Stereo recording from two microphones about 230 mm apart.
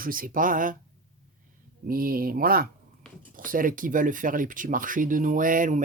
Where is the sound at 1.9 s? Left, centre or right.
Right.